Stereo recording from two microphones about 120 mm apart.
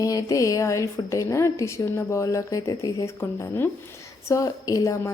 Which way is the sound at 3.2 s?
20° left (ahead or behind).